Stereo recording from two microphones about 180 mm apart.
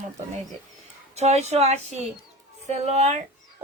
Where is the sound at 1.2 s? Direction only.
40° right (ahead or behind).